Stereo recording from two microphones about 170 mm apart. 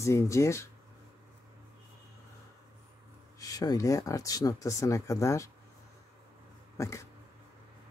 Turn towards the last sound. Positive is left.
turn(degrees=20)  # may be behind; listen again after turning